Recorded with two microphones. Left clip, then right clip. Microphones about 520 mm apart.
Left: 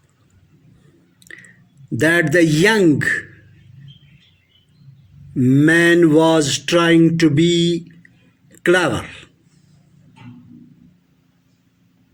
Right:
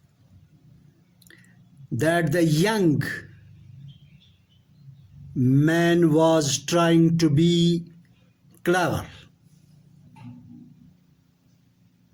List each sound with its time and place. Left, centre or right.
2.0 s mantra: right
5.4 s mantra: right
8.6 s speech: right